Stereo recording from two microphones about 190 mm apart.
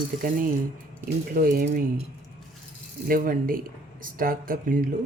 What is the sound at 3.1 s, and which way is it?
Speech, 50° right (ahead or behind).